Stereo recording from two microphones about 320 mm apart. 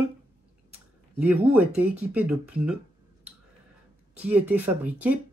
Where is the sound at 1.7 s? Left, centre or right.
Centre.